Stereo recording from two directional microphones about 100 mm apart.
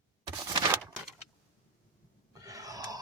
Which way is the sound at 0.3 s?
50° right (ahead or behind).